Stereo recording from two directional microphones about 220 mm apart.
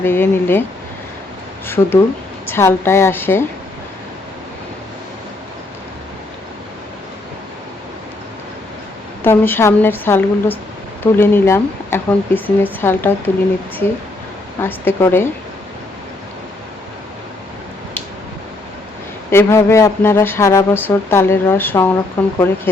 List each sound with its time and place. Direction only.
0.0 s speech: 10° left (ahead or behind)
1.6 s speech: 10° left (ahead or behind)
9.2 s speech: 10° left (ahead or behind)
14.6 s speech: 10° left (ahead or behind)
19.3 s speech: 10° left (ahead or behind)